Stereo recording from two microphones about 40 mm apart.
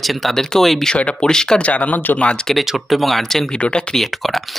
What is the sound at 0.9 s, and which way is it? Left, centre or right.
Speech, left.